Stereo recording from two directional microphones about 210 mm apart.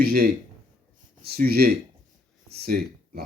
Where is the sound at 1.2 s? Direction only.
45° right (ahead or behind).